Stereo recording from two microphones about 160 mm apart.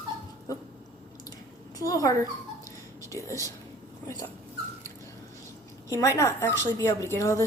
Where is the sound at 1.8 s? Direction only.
20° left (ahead or behind).